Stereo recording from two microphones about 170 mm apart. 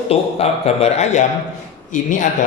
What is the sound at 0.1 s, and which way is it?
Speech, 35° left (ahead or behind).